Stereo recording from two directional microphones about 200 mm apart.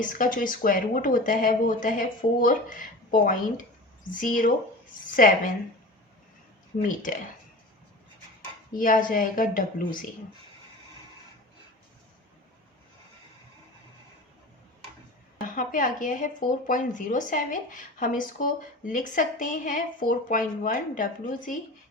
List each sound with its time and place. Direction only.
0.0 s speech: 40° left (ahead or behind)
6.8 s speech: 40° left (ahead or behind)
8.8 s speech: 45° left (ahead or behind)
15.4 s speech: 40° left (ahead or behind)